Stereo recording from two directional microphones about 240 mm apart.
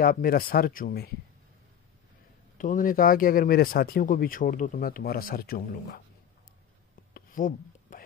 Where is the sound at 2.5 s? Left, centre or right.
Left.